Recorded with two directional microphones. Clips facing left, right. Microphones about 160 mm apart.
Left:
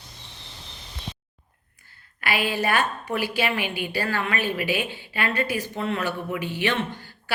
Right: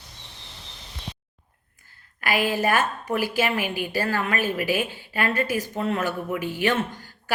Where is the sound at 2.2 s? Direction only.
45° right (ahead or behind).